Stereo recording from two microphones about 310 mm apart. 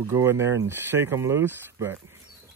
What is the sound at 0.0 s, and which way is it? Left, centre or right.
Speech, centre.